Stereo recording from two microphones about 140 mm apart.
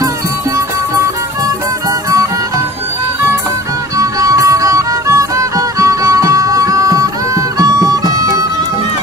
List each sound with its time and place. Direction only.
4.0 s music: 25° right (ahead or behind)